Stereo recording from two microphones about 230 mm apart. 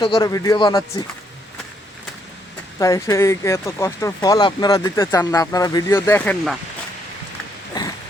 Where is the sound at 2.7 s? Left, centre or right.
Centre.